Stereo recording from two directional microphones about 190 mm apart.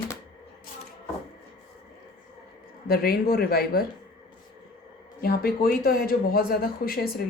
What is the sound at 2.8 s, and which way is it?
Speech, 55° left (ahead or behind).